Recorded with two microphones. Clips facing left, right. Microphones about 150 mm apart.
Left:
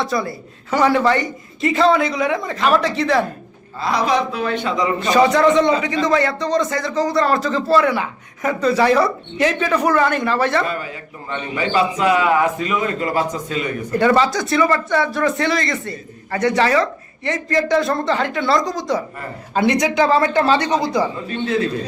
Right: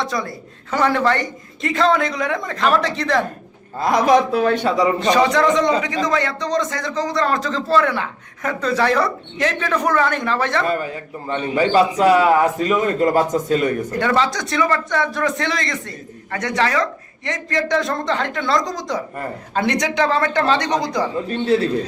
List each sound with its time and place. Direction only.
0.0 s a man's voice: 5° left (ahead or behind)
3.8 s a man's voice: 50° right (ahead or behind)
4.9 s a man's voice: 5° left (ahead or behind)
11.3 s a man's voice: 40° right (ahead or behind)
14.0 s a man's voice: 5° left (ahead or behind)
21.2 s a man's voice: 35° right (ahead or behind)